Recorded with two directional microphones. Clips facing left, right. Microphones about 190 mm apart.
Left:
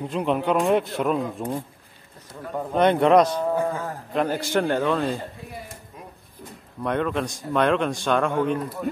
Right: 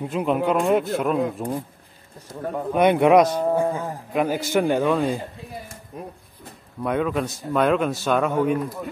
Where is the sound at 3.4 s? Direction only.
25° right (ahead or behind).